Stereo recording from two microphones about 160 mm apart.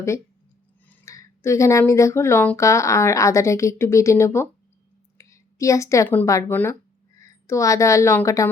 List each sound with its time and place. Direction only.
0.9 s a woman's voice: 15° left (ahead or behind)